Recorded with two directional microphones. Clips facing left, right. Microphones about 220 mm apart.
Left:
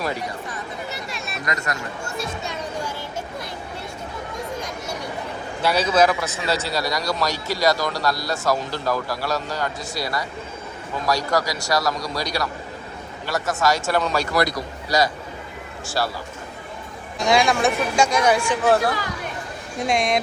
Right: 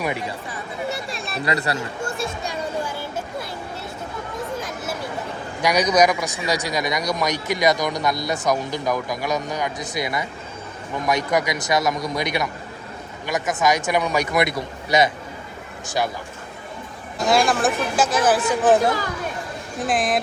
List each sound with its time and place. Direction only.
1.1 s chatter: 30° right (ahead or behind)
5.6 s a man's voice: 15° right (ahead or behind)
17.2 s speech: centre (ahead or behind)
18.6 s a man's voice: 20° right (ahead or behind)
19.8 s speech: centre (ahead or behind)